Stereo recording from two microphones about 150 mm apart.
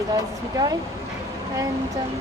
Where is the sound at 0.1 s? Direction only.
25° right (ahead or behind).